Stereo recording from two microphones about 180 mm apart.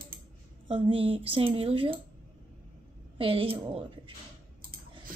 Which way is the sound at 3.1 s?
30° right (ahead or behind).